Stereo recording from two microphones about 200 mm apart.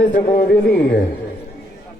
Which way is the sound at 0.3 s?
45° left (ahead or behind).